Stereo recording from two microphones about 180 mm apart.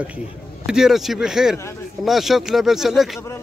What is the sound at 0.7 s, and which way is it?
Speech, 5° right (ahead or behind).